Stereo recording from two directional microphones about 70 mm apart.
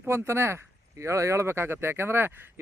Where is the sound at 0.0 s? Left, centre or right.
Right.